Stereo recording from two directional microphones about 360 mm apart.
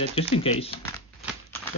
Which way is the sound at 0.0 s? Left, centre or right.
Centre.